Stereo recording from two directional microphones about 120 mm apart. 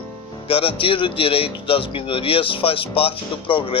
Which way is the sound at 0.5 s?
50° left (ahead or behind).